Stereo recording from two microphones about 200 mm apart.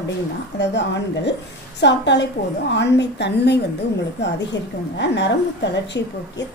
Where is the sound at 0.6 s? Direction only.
60° left (ahead or behind).